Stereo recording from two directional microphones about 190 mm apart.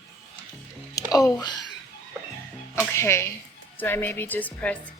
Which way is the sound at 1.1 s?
15° left (ahead or behind).